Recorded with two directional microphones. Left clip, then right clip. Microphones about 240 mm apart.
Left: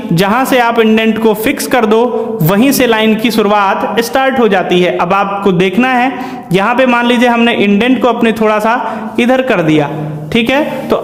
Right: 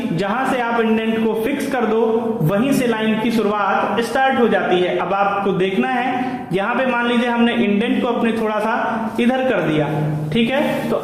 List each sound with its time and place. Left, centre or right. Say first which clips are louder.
0.2 s a man's voice: left 10 dB; left
2.5 s a man's voice: left 10 dB; left